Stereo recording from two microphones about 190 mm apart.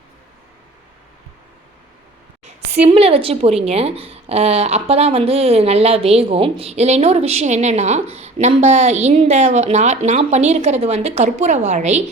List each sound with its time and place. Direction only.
2.8 s a woman's voice: 30° right (ahead or behind)